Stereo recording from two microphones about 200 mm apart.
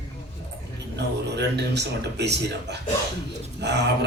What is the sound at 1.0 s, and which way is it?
A man's voice, 60° right (ahead or behind).